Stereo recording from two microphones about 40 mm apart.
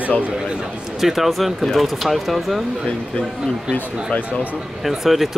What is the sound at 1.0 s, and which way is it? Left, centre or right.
Speech, centre.